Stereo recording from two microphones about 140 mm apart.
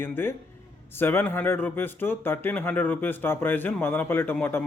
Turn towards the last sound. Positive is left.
turn(degrees=15)  # may be behind; listen again after turning